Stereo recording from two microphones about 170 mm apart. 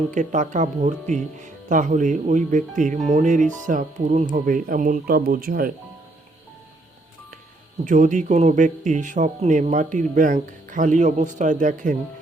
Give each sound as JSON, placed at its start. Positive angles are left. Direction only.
{"t": 0.1, "sound": "speech", "side_deg": -45}
{"t": 7.9, "sound": "speech", "side_deg": -50}